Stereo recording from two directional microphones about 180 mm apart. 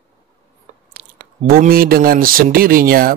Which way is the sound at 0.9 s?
55° right (ahead or behind).